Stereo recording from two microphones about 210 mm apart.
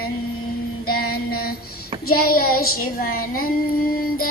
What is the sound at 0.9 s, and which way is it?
Music, 45° left (ahead or behind).